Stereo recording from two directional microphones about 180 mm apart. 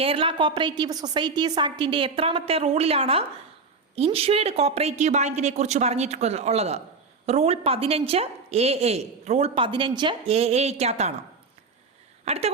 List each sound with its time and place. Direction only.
0.0 s a woman's voice: 30° right (ahead or behind)
12.2 s speech: 35° right (ahead or behind)